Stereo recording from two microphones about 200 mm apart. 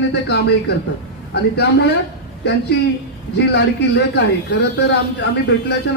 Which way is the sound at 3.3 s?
55° left (ahead or behind).